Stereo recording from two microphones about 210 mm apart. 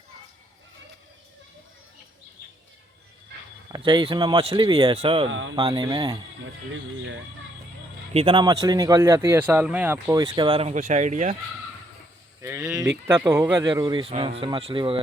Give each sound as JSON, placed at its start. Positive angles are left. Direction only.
{"t": 3.7, "sound": "speech", "side_deg": -20}
{"t": 5.3, "sound": "speech", "side_deg": -70}
{"t": 5.5, "sound": "speech", "side_deg": -20}
{"t": 8.1, "sound": "speech", "side_deg": -25}
{"t": 10.2, "sound": "speech", "side_deg": -25}
{"t": 10.8, "sound": "speech", "side_deg": -35}
{"t": 12.4, "sound": "a sound", "side_deg": -15}
{"t": 13.1, "sound": "speech", "side_deg": -10}